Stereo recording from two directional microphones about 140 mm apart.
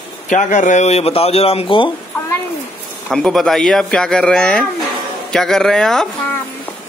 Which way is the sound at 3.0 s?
5° left (ahead or behind).